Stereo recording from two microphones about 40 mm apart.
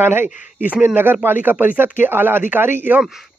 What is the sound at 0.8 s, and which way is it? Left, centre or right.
Speech, right.